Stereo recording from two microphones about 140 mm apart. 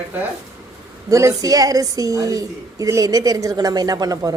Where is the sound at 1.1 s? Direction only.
25° right (ahead or behind).